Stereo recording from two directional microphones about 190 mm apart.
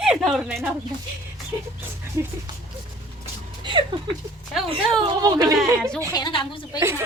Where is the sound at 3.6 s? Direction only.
25° right (ahead or behind).